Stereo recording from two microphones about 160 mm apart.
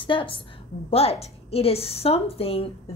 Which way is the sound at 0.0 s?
30° left (ahead or behind).